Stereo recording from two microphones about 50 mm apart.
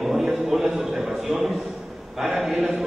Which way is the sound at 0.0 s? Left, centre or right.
Centre.